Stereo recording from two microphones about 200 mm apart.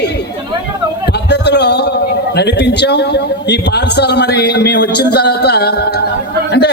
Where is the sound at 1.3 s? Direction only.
55° left (ahead or behind).